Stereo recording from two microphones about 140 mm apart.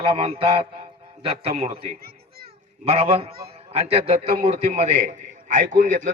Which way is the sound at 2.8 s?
45° right (ahead or behind).